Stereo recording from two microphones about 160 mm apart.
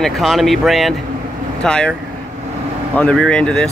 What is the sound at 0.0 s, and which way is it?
Speech, centre (ahead or behind).